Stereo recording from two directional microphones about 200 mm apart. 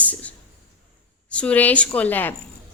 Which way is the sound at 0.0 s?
5° left (ahead or behind).